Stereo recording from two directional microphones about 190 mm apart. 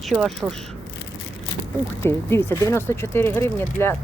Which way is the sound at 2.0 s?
10° left (ahead or behind).